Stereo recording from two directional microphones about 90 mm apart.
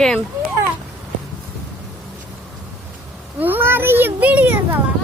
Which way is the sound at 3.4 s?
25° right (ahead or behind).